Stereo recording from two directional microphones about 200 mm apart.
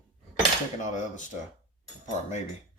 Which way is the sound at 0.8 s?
40° left (ahead or behind).